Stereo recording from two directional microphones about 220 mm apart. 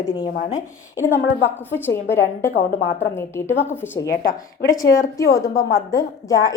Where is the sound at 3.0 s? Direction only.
10° left (ahead or behind).